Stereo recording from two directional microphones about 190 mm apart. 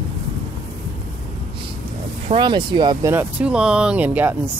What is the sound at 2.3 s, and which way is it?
Speech, 25° right (ahead or behind).